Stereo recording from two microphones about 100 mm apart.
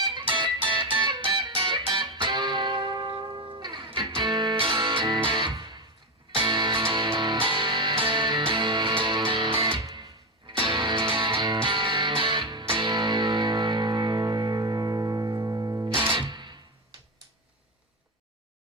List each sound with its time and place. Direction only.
0.0 s music: 50° right (ahead or behind)
16.1 s music: 50° right (ahead or behind)